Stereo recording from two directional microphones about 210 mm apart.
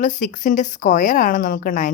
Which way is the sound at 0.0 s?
40° left (ahead or behind).